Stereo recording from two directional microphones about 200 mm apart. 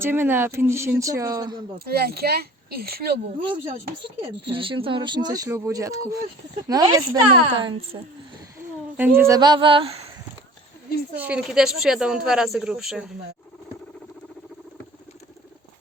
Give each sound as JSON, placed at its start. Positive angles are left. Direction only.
{"t": 0.0, "sound": "speech", "side_deg": -10}
{"t": 1.8, "sound": "speech", "side_deg": -50}
{"t": 3.4, "sound": "speech", "side_deg": -25}
{"t": 11.2, "sound": "speech", "side_deg": -5}